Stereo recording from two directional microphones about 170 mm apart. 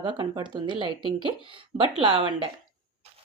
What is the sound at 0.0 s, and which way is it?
Speech, 25° right (ahead or behind).